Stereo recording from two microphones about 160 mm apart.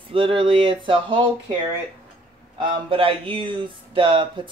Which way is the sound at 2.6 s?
30° right (ahead or behind).